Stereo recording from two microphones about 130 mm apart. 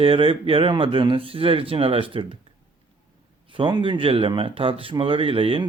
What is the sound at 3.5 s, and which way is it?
Speech, 40° right (ahead or behind).